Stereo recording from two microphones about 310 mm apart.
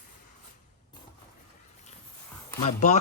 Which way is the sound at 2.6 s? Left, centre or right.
Left.